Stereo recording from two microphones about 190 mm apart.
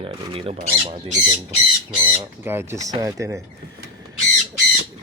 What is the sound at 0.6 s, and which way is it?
Speech, 40° right (ahead or behind).